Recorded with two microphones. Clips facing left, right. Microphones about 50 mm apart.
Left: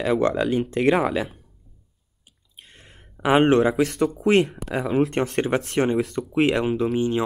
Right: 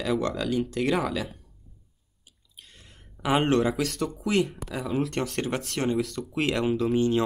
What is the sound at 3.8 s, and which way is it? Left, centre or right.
Speech, left.